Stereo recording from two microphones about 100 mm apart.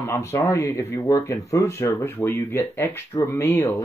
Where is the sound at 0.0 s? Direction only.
25° left (ahead or behind).